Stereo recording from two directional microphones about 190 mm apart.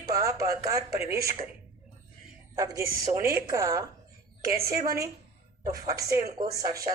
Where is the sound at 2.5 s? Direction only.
15° right (ahead or behind).